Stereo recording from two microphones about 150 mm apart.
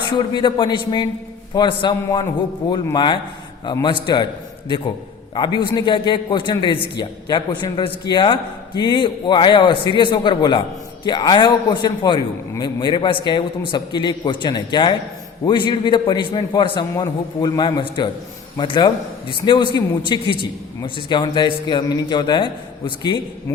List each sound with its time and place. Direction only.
0.3 s a man's voice: 30° left (ahead or behind)
5.3 s a man's voice: 30° left (ahead or behind)
16.9 s a man's voice: 20° left (ahead or behind)